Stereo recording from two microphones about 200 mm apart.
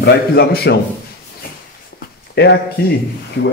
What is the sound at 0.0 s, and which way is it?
Speech, 55° left (ahead or behind).